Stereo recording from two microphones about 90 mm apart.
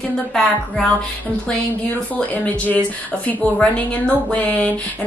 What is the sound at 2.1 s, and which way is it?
A woman's voice, 20° left (ahead or behind).